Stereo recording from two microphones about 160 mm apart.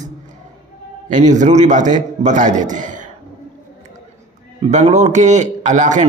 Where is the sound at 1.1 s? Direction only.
50° right (ahead or behind).